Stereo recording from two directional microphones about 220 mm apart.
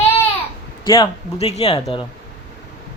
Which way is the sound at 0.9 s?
25° left (ahead or behind).